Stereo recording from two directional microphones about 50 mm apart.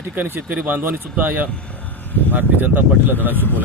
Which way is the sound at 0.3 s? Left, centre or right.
Right.